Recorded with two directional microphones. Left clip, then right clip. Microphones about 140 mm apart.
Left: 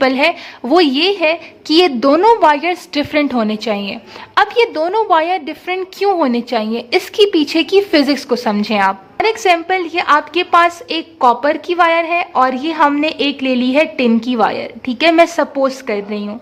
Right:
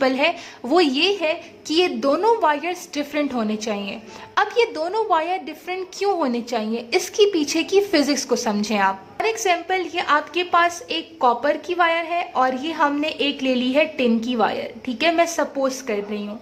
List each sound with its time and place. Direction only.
0.0 s a woman's voice: 20° left (ahead or behind)